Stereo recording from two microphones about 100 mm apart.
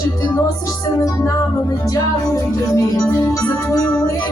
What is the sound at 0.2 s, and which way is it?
Music, 35° left (ahead or behind).